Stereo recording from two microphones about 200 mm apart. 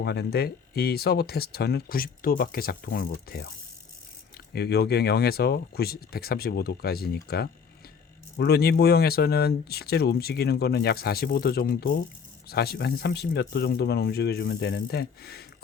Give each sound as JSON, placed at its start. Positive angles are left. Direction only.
{"t": 0.0, "sound": "speech", "side_deg": 55}
{"t": 4.5, "sound": "speech", "side_deg": 55}